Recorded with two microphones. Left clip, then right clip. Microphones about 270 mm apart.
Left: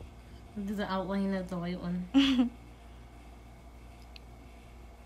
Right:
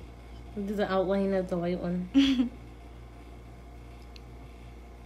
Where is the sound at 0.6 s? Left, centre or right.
Centre.